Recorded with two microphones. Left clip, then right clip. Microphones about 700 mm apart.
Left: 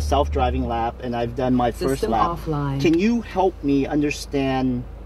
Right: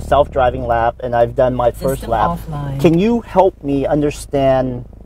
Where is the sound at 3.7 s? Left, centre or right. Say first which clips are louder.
Right 6 dB; right.